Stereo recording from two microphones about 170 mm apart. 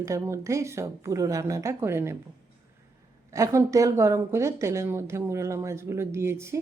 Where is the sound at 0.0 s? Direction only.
15° right (ahead or behind).